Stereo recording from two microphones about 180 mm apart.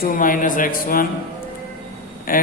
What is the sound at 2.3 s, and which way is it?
Speech, 50° left (ahead or behind).